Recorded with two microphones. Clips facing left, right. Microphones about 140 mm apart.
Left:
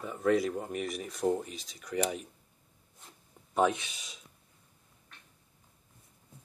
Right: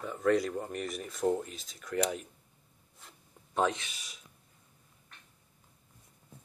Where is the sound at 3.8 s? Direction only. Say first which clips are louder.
Left 1 dB; 20° left (ahead or behind).